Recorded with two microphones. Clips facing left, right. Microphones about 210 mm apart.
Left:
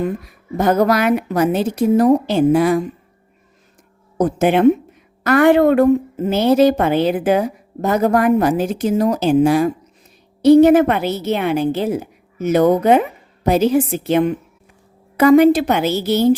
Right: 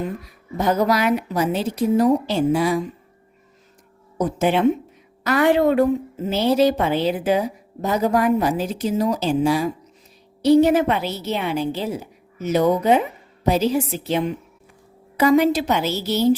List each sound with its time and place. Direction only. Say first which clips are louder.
0.5 s a woman's voice: left 4 dB; 55° left (ahead or behind)
4.2 s a woman's voice: left 5 dB; 50° left (ahead or behind)